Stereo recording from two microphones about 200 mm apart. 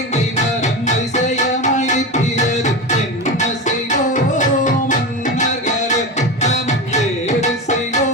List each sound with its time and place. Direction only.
0.6 s music: 35° left (ahead or behind)
3.8 s music: 40° left (ahead or behind)